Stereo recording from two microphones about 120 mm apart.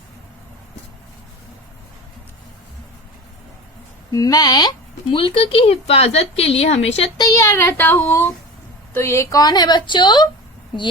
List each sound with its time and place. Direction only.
4.1 s a woman's voice: 30° left (ahead or behind)
5.0 s a woman's voice: 45° left (ahead or behind)
7.2 s child singing: 25° left (ahead or behind)
8.9 s a woman's voice: 20° left (ahead or behind); by 10.2 s 40° left (ahead or behind)